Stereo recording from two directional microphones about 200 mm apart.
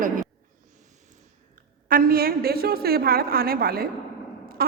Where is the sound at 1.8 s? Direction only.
45° right (ahead or behind).